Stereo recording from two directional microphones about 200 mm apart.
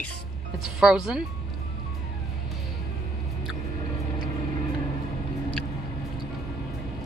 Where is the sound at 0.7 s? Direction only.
5° right (ahead or behind).